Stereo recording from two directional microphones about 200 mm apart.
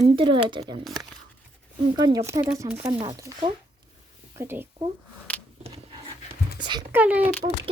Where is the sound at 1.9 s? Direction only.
20° right (ahead or behind).